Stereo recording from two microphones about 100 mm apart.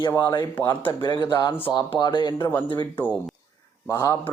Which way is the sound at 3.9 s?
35° left (ahead or behind).